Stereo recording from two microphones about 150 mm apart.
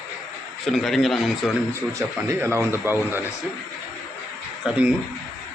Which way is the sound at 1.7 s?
15° right (ahead or behind).